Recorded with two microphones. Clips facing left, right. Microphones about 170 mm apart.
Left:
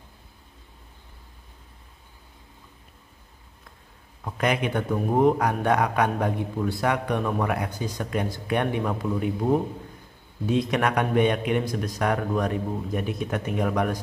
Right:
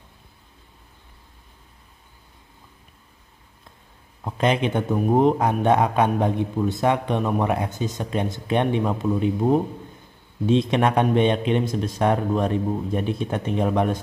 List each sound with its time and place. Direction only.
4.2 s a man's voice: 25° right (ahead or behind)